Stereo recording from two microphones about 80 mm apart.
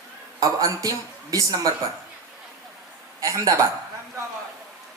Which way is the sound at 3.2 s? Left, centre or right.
Right.